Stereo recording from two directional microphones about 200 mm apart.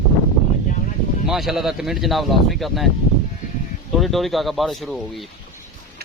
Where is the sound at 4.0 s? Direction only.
Centre (ahead or behind).